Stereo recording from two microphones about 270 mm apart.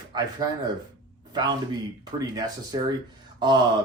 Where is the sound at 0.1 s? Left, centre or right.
Centre.